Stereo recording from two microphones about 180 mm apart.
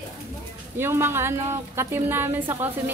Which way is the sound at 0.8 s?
15° right (ahead or behind).